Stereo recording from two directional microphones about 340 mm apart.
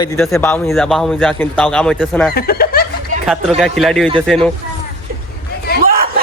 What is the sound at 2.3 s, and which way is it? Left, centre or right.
Speech, left.